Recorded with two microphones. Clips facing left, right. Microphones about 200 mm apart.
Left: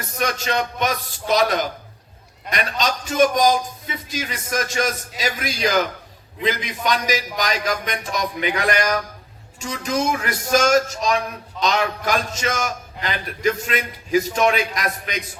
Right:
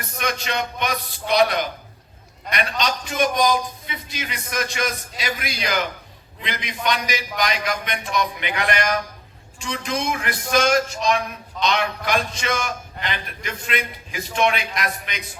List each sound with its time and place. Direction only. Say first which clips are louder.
0.2 s a man's voice: left 3 dB; 40° left (ahead or behind)